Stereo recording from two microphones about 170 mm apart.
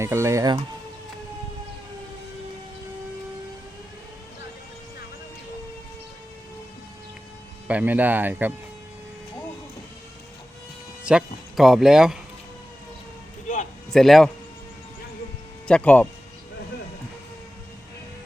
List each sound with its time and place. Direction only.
0.0 s speech: 15° right (ahead or behind)
7.7 s speech: 10° right (ahead or behind)
11.0 s speech: 5° right (ahead or behind)
13.9 s speech: centre (ahead or behind)
15.6 s speech: 5° left (ahead or behind)